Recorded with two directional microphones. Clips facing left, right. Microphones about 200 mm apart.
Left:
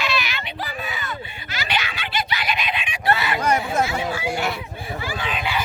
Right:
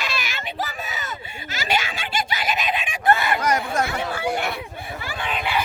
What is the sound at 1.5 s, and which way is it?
Screaming, 45° right (ahead or behind).